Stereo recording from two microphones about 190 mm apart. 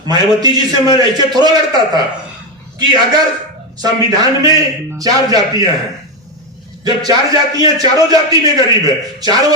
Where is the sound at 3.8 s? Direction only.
20° right (ahead or behind).